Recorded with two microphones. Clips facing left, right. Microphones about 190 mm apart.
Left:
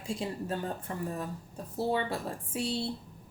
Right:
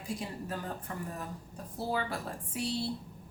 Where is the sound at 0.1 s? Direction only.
25° left (ahead or behind).